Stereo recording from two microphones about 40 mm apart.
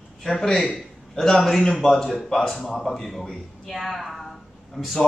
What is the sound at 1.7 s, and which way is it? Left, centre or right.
A woman's voice, centre.